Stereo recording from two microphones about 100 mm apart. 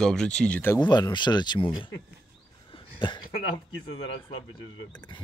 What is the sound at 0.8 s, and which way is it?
Speech, 50° left (ahead or behind).